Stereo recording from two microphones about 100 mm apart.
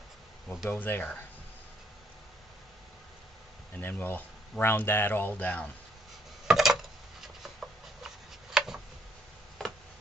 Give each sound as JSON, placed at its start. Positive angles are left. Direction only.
{"t": 0.7, "sound": "speech", "side_deg": 20}
{"t": 3.8, "sound": "speech", "side_deg": 20}
{"t": 6.5, "sound": "a sound", "side_deg": -5}